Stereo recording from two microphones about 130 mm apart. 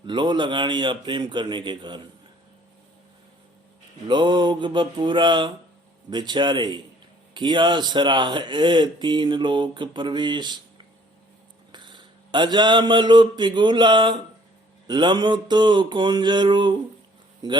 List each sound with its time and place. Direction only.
0.0 s speech: 35° right (ahead or behind)
4.1 s speech: 35° right (ahead or behind)
11.7 s a sound: 35° right (ahead or behind)
14.8 s speech: 35° right (ahead or behind)